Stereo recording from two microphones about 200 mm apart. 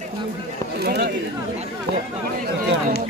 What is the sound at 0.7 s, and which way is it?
Speech, 55° right (ahead or behind).